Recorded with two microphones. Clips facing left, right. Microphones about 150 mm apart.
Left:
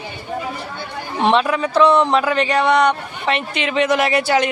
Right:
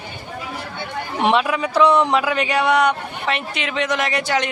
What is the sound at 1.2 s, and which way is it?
A man's voice, 10° right (ahead or behind).